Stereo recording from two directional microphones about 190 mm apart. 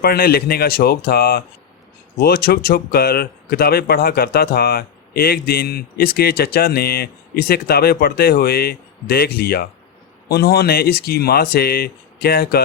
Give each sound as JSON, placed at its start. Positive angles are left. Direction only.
{"t": 0.0, "sound": "speech", "side_deg": 55}